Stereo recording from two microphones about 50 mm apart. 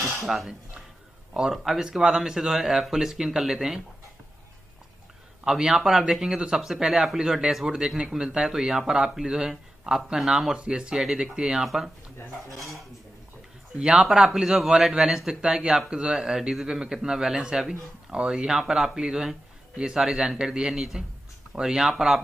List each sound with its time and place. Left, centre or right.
0.2 s speech: centre
1.5 s a man's voice: centre
5.4 s a man's voice: centre
13.7 s a man's voice: centre
16.3 s a man's voice: centre